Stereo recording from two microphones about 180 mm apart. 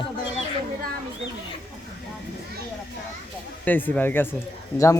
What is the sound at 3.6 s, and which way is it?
Speech, 10° left (ahead or behind).